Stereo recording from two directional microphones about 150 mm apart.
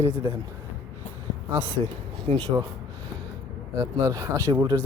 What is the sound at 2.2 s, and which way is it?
Speech, 30° right (ahead or behind).